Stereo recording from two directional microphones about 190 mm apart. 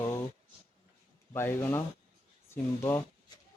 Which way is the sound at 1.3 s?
10° left (ahead or behind).